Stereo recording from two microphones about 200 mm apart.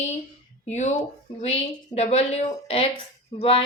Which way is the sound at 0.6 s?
35° left (ahead or behind).